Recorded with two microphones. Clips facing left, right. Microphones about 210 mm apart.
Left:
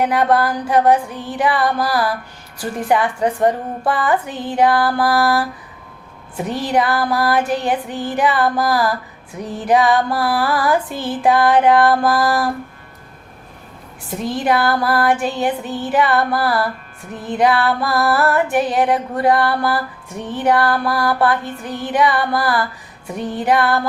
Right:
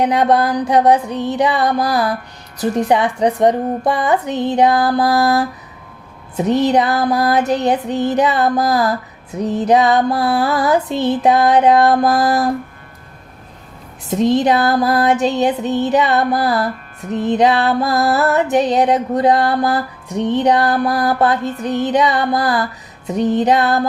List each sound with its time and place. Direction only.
0.0 s music: 20° right (ahead or behind)
14.1 s music: 20° right (ahead or behind)